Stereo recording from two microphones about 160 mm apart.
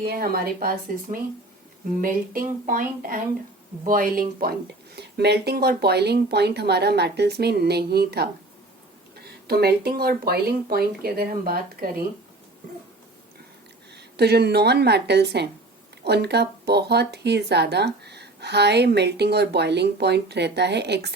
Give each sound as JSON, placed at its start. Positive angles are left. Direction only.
{"t": 0.0, "sound": "speech", "side_deg": -70}
{"t": 4.9, "sound": "speech", "side_deg": -90}
{"t": 13.9, "sound": "speech", "side_deg": -90}